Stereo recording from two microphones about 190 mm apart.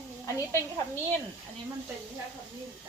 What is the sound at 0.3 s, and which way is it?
Speech, 15° left (ahead or behind).